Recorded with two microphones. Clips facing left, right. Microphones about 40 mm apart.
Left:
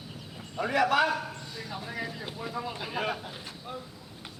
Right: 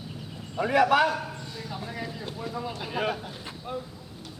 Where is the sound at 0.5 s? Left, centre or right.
Centre.